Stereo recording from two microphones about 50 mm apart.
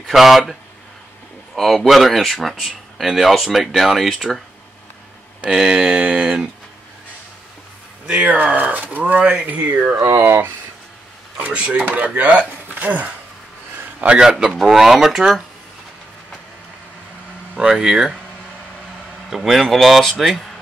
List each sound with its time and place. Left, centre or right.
0.0 s speech: centre
5.5 s a sound: centre
8.1 s speech: right
9.8 s speech: right
10.1 s speech: right
11.7 s speech: right
12.6 s a sound: right
14.3 s speech: centre
17.6 s speech: centre
19.3 s speech: centre